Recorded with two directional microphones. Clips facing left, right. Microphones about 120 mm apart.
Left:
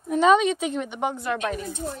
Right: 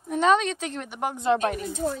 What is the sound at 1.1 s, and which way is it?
Speech, 25° right (ahead or behind).